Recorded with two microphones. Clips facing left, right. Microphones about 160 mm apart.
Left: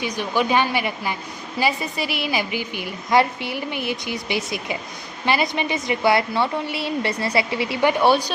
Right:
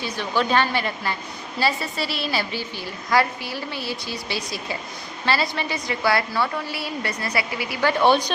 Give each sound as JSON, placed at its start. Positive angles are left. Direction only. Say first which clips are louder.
{"t": 0.0, "sound": "a woman's voice", "louder": "left 2 dB", "side_deg": 15}